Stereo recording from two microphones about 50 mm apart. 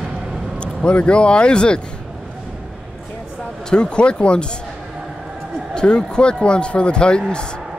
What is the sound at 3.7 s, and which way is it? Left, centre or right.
Speech, centre.